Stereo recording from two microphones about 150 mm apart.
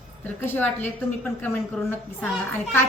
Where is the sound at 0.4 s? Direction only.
15° left (ahead or behind).